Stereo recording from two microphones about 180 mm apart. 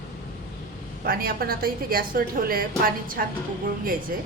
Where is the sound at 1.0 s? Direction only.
55° right (ahead or behind).